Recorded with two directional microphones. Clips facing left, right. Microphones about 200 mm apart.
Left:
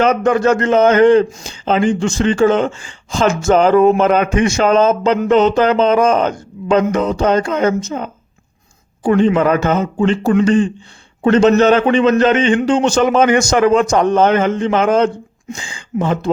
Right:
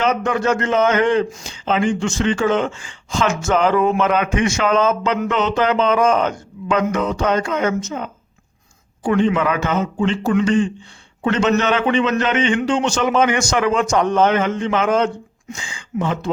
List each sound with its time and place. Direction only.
0.0 s a man's voice: 45° left (ahead or behind)